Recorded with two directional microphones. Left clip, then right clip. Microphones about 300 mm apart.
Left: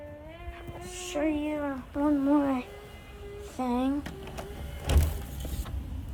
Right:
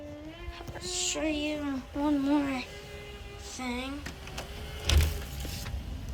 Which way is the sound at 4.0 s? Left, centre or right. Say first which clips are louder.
Left 1 dB; left.